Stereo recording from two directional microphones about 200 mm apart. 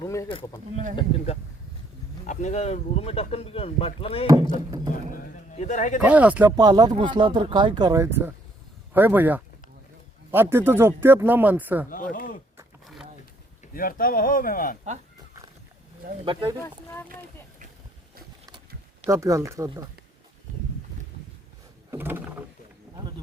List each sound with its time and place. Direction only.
0.0 s speech: 15° left (ahead or behind)
0.9 s speech: 30° left (ahead or behind)
5.1 s a sound: 35° left (ahead or behind)
6.0 s speech: 5° right (ahead or behind)
6.6 s speech: 20° right (ahead or behind)
11.9 s speech: 45° left (ahead or behind)
12.8 s a sound: centre (ahead or behind)
13.7 s speech: 45° left (ahead or behind)
16.2 s speech: 25° right (ahead or behind)
16.6 s speech: 10° left (ahead or behind)
19.1 s speech: 15° right (ahead or behind)
21.8 s wild animals: 10° right (ahead or behind)